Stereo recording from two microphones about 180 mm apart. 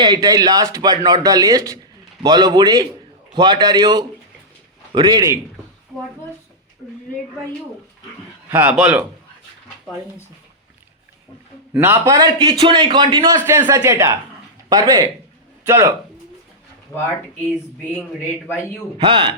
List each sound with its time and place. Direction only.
0.0 s speech: 25° right (ahead or behind)
5.9 s speech: centre (ahead or behind)
8.4 s speech: 10° right (ahead or behind)
11.7 s speech: 10° right (ahead or behind)
16.9 s a man's voice: 15° left (ahead or behind)
18.4 s a man's voice: 10° left (ahead or behind)
18.9 s speech: 30° right (ahead or behind)